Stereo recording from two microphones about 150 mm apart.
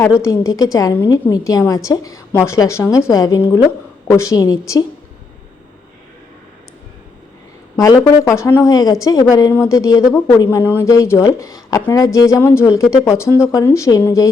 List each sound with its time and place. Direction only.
0.2 s a woman's voice: 20° left (ahead or behind)
7.8 s a woman's voice: 25° left (ahead or behind)